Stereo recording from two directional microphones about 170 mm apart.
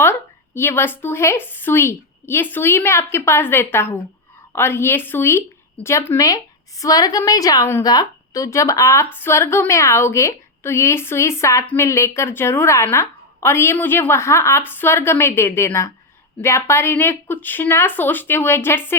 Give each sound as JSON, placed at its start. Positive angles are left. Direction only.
{"t": 0.0, "sound": "a woman's voice", "side_deg": 15}